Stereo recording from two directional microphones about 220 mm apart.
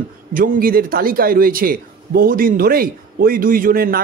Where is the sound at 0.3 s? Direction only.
40° right (ahead or behind).